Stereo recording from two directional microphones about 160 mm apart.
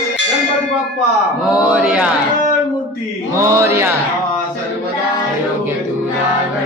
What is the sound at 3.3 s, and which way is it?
Mantra, 15° right (ahead or behind).